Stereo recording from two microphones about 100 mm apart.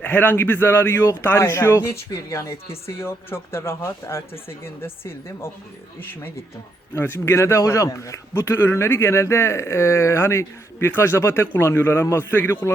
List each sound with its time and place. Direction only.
0.0 s a man's voice: 20° left (ahead or behind)
6.9 s a man's voice: 25° left (ahead or behind)